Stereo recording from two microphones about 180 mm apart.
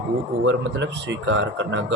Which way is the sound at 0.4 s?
80° right.